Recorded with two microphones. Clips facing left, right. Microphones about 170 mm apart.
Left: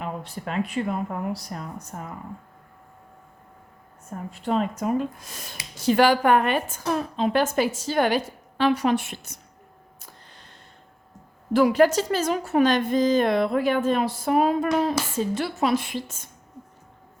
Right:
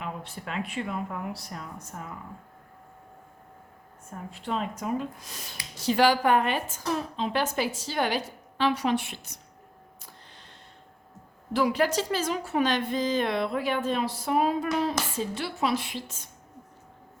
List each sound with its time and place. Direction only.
0.0 s speech: 40° left (ahead or behind)
4.3 s a woman's voice: 45° left (ahead or behind)
11.5 s a woman's voice: 50° left (ahead or behind)